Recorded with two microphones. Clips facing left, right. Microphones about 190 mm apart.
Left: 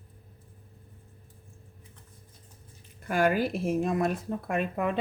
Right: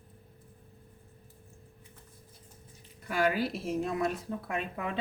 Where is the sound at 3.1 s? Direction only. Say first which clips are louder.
Left 4 dB; 50° left (ahead or behind).